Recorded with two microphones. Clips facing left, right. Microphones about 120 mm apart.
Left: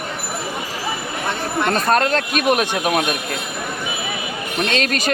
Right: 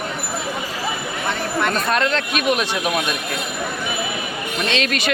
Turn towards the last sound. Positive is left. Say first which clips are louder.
# left 1 dB
turn(degrees=40)  # may be behind; listen again after turning